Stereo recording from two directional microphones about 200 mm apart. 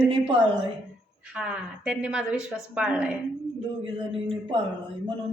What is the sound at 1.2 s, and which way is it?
A woman's voice, 5° right (ahead or behind).